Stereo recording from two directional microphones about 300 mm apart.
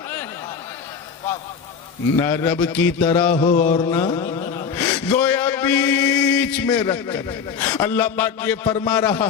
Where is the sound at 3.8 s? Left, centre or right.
Centre.